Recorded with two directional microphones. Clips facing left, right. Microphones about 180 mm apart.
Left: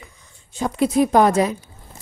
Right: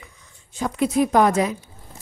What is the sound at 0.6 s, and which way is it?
A woman's voice, 30° left (ahead or behind).